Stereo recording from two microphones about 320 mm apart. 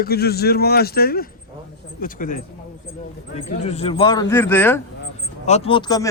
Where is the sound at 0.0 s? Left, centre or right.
Left.